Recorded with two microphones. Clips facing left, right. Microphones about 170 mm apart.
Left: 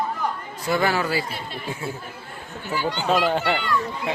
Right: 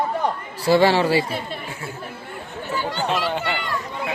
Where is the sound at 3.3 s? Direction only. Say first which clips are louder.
Left 3 dB; 40° left (ahead or behind).